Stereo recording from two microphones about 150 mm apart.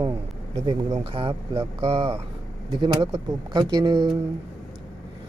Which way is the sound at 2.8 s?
30° right (ahead or behind).